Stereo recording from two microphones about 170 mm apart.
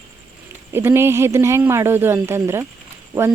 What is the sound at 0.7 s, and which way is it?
A woman's voice, 15° right (ahead or behind).